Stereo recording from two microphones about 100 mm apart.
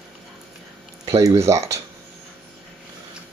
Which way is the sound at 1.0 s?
30° right (ahead or behind).